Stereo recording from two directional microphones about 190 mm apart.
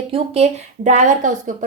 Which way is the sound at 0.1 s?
35° right (ahead or behind).